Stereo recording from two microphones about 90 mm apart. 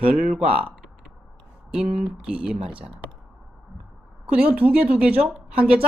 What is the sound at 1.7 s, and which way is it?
Speech, 10° right (ahead or behind).